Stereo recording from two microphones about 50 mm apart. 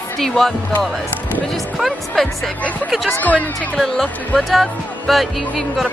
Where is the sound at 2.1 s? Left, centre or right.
Centre.